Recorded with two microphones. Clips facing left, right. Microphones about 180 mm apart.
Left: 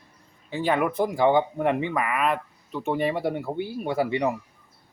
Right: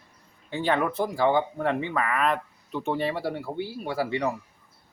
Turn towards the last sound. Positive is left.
turn(degrees=20)  # may be behind; listen again after turning